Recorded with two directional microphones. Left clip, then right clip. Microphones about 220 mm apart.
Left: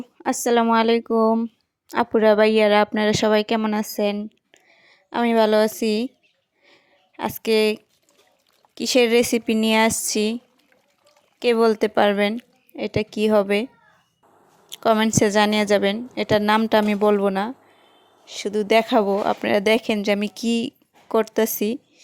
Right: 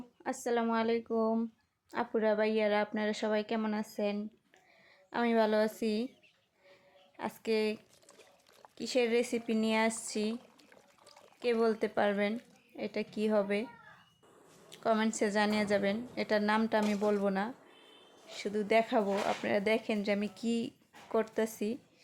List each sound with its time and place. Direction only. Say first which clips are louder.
0.0 s speech: left 14 dB; 40° left (ahead or behind)
7.2 s speech: left 13 dB; 45° left (ahead or behind)
11.3 s a woman's voice: left 12 dB; 40° left (ahead or behind)
14.7 s a woman's voice: left 12 dB; 40° left (ahead or behind)